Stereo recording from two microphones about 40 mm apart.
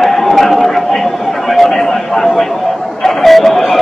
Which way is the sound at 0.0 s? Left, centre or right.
Centre.